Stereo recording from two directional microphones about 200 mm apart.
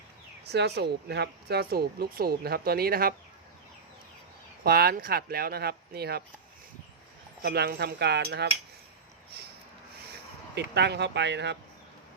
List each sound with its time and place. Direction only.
0.4 s speech: 55° right (ahead or behind)
4.6 s speech: 50° right (ahead or behind)
7.4 s cutlery: 50° right (ahead or behind)
10.1 s speech: 60° right (ahead or behind)